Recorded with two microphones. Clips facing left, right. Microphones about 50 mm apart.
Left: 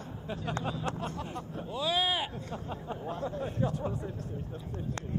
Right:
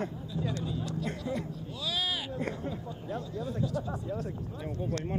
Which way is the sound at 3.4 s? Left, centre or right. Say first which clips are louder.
Even; left.